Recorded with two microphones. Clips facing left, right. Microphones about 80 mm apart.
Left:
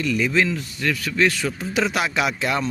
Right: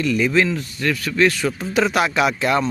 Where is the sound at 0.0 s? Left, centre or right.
Right.